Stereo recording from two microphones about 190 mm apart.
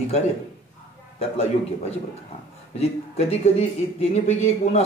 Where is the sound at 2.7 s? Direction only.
35° left (ahead or behind).